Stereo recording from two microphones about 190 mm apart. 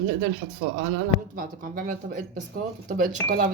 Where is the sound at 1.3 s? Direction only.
45° right (ahead or behind).